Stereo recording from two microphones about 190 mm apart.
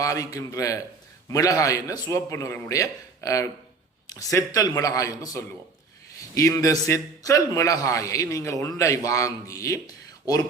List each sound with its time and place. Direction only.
0.0 s a man's voice: 15° left (ahead or behind)